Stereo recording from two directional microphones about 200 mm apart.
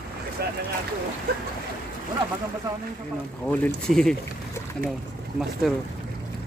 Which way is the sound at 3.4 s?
5° left (ahead or behind).